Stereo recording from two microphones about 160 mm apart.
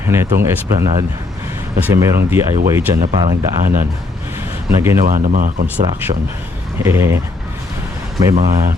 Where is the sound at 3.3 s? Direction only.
60° right (ahead or behind).